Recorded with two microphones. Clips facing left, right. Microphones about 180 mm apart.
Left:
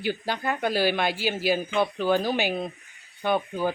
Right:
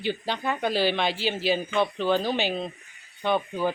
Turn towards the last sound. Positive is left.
turn(degrees=10)  # may be behind; listen again after turning